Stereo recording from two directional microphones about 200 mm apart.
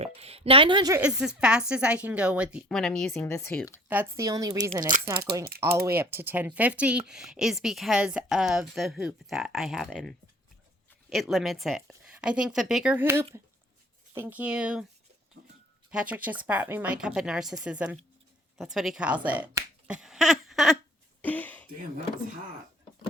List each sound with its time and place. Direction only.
0.0 s speech: 30° right (ahead or behind)
1.0 s speech: 5° right (ahead or behind); by 3.8 s 10° left (ahead or behind)
3.8 s speech: 10° right (ahead or behind)
15.9 s speech: 5° right (ahead or behind)
21.2 s a sound: 10° left (ahead or behind)